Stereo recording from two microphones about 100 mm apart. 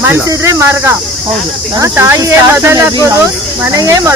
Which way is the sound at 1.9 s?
25° right (ahead or behind).